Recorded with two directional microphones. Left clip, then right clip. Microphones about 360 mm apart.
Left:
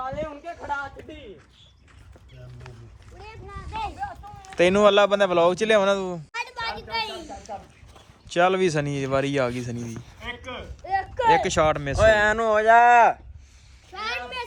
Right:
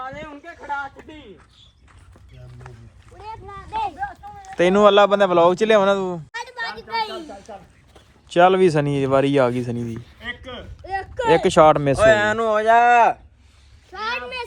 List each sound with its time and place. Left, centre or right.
0.6 s speech: centre
3.2 s speech: centre
4.0 s speech: centre
10.2 s a sound: right
11.3 s speech: centre; by 13.1 s right
13.9 s speech: centre